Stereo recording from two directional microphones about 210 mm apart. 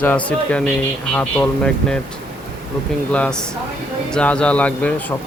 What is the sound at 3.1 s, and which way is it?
Speech, 5° left (ahead or behind).